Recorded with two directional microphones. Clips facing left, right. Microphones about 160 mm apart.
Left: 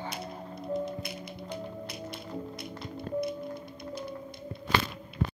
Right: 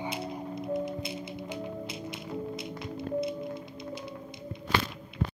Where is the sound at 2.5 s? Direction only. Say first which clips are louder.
Right 3 dB; 20° right (ahead or behind).